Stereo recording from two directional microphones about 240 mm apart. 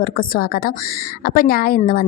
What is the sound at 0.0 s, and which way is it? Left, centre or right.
A woman's voice, left.